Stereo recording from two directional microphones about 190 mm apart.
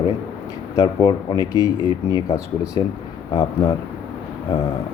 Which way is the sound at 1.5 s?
20° left (ahead or behind).